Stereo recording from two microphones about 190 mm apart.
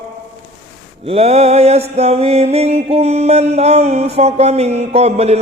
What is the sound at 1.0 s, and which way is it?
Mantra, 30° right (ahead or behind).